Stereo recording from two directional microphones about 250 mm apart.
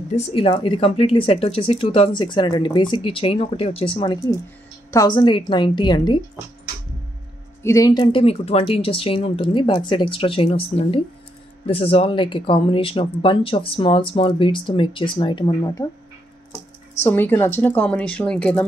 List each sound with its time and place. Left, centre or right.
0.1 s speech: left
7.6 s speech: centre
17.0 s a woman's voice: centre